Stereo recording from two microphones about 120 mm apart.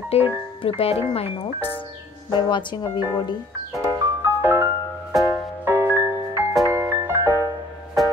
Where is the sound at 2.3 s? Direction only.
40° left (ahead or behind).